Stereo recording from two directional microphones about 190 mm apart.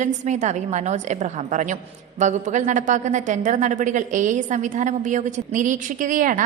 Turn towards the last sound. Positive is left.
turn(degrees=-45)  # may be behind; listen again after turning